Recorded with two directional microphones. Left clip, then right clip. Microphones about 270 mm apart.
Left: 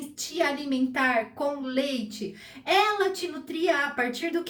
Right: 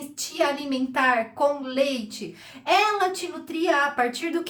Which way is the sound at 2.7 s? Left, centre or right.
Centre.